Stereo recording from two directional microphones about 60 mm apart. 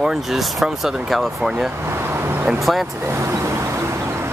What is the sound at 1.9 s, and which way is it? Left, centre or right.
Vehicle, right.